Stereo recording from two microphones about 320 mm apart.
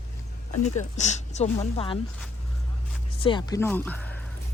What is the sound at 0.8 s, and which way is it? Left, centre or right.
Speech, left.